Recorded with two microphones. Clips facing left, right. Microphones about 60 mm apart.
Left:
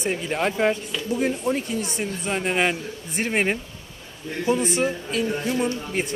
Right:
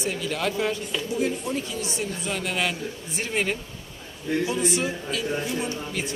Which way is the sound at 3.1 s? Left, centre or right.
Left.